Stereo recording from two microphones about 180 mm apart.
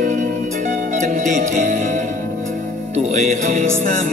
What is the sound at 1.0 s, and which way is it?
Music, 40° right (ahead or behind).